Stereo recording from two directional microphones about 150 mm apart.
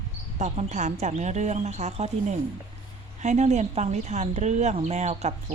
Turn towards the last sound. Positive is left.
turn(degrees=-50)  # may be behind; listen again after turning